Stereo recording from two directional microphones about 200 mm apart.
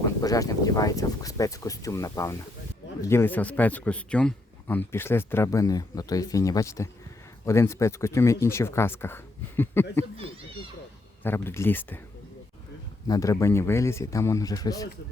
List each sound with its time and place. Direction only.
0.2 s speech: 15° left (ahead or behind)
11.2 s speech: 10° left (ahead or behind)
13.1 s speech: 15° left (ahead or behind)